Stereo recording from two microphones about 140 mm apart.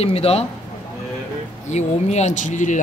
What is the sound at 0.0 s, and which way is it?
Speech, 45° left (ahead or behind).